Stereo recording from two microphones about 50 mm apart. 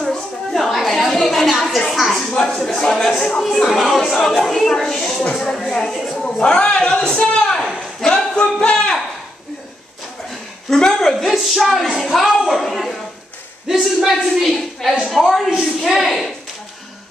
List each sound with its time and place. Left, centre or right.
0.0 s a sound: centre
2.3 s a woman's voice: centre
3.7 s a woman's voice: centre
7.6 s a sound: centre
8.4 s speech: left
10.7 s a woman's voice: centre